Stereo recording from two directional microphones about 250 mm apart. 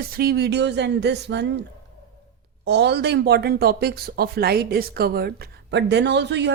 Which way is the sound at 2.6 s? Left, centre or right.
Right.